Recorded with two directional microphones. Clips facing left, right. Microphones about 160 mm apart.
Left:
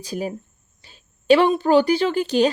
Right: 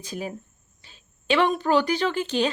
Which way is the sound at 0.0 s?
35° left (ahead or behind).